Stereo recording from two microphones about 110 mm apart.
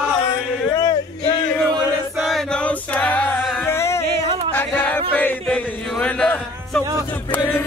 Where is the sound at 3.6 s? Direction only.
25° left (ahead or behind).